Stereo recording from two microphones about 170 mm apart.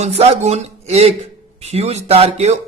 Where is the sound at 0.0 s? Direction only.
40° right (ahead or behind).